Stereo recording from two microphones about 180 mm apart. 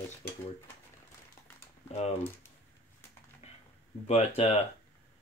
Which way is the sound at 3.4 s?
35° left (ahead or behind).